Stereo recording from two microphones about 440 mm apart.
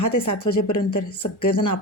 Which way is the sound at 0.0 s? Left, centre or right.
Left.